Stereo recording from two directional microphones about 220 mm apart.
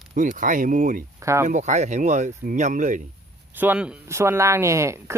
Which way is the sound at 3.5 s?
10° right (ahead or behind).